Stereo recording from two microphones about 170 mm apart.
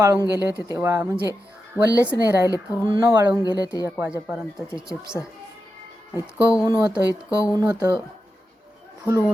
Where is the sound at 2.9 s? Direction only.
20° right (ahead or behind).